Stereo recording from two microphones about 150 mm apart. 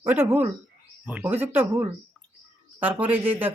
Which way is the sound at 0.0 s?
15° right (ahead or behind).